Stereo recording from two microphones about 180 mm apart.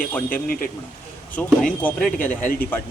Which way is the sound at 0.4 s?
55° left (ahead or behind).